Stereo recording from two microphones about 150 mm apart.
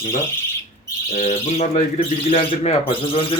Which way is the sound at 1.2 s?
45° left (ahead or behind).